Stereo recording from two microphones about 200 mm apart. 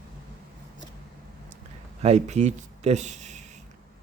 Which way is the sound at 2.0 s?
35° right (ahead or behind).